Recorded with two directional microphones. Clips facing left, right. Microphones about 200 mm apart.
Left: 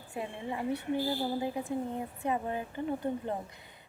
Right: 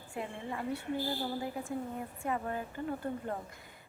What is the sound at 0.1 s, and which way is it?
A woman's voice, 20° left (ahead or behind).